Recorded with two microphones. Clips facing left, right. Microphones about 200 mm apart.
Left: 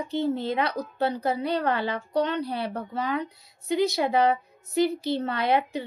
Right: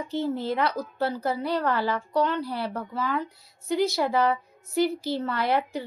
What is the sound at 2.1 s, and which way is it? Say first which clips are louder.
Speech: left 1 dB; 70° left (ahead or behind).